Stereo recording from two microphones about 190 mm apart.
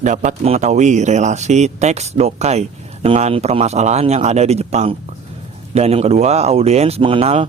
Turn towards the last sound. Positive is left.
turn(degrees=-30)  # may be behind; listen again after turning